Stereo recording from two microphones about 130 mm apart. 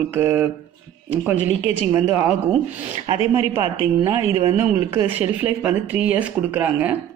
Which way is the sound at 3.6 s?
30° right (ahead or behind).